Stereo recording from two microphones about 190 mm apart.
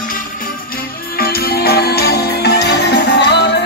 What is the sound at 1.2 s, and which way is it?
Music, 55° left (ahead or behind).